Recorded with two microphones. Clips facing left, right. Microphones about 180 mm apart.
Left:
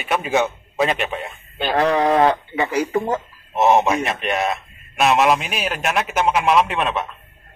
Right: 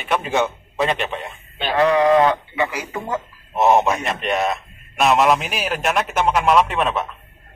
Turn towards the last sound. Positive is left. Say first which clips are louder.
# right 1 dB
turn(degrees=0)  # may be behind; listen again after turning